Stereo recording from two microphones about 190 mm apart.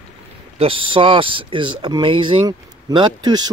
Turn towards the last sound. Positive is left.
turn(degrees=-20)  # may be behind; listen again after turning